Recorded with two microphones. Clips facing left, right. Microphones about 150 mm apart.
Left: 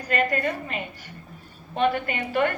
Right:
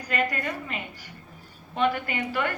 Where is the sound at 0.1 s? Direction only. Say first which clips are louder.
Left 3 dB; 50° left (ahead or behind).